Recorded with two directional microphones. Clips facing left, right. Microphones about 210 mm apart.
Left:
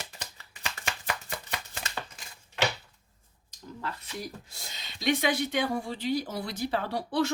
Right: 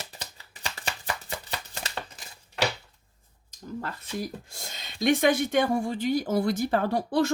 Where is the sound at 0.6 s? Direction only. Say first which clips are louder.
Right 2 dB; 35° right (ahead or behind).